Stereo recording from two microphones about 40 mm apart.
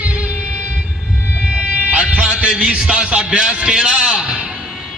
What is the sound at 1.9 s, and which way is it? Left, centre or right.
Music, right.